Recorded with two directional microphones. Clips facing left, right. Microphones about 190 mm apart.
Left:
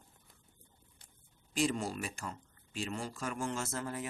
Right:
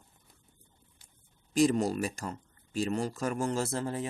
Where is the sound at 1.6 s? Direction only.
40° right (ahead or behind).